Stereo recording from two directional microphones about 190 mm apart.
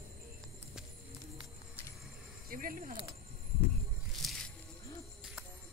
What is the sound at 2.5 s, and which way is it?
Speech, 45° right (ahead or behind).